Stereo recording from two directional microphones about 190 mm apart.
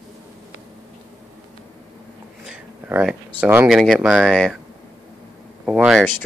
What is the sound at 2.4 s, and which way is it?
Speech, 5° right (ahead or behind).